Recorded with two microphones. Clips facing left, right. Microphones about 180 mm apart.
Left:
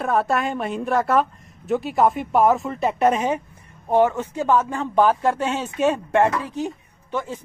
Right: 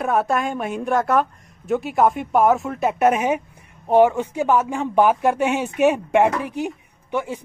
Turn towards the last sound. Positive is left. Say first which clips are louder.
# right 3 dB
turn(degrees=-15)  # may be behind; listen again after turning